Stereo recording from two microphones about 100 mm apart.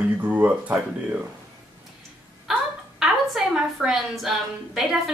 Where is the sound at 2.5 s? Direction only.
5° right (ahead or behind).